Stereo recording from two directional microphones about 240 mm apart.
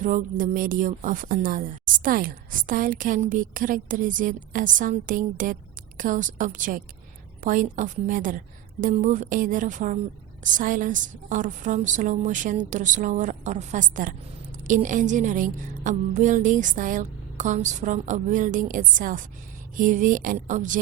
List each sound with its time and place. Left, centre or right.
0.0 s a woman's voice: right